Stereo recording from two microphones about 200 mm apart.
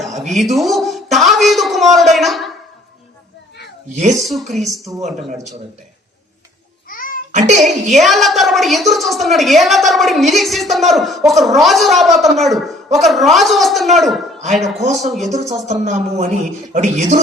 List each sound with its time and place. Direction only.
0.2 s a woman's voice: centre (ahead or behind)
4.1 s a woman's voice: centre (ahead or behind)
6.8 s babbling: 45° left (ahead or behind)
7.3 s speech: 35° right (ahead or behind)
7.9 s a woman's voice: centre (ahead or behind)
15.6 s speech: 35° right (ahead or behind)